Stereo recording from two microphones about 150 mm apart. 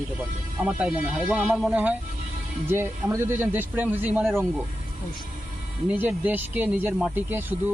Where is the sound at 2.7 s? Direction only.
15° right (ahead or behind).